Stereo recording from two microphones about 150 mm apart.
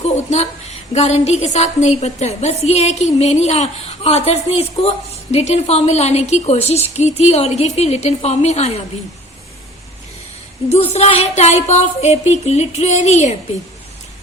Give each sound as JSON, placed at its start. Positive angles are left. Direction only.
{"t": 0.0, "sound": "a woman's voice", "side_deg": 45}
{"t": 10.7, "sound": "a woman's voice", "side_deg": 45}